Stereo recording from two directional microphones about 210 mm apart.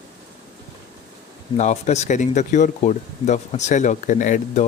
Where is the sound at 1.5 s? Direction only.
35° left (ahead or behind).